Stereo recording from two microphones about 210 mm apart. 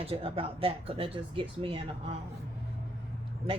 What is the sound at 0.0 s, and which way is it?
Speech, 25° right (ahead or behind).